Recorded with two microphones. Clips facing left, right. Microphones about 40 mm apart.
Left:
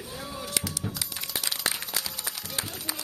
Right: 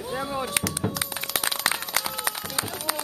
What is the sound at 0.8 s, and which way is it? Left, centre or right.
Music, right.